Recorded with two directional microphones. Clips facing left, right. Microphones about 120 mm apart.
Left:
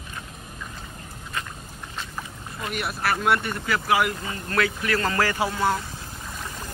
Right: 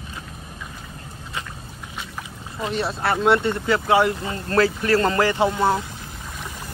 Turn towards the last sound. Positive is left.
turn(degrees=-25)  # may be behind; listen again after turning